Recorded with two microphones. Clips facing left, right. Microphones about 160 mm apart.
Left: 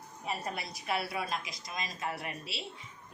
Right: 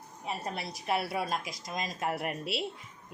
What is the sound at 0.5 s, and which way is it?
Speech, 35° right (ahead or behind).